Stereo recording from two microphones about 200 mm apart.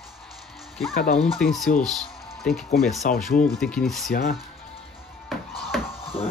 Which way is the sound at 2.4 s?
Centre (ahead or behind).